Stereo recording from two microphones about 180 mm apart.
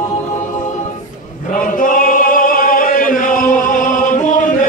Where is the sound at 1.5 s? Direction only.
50° left (ahead or behind).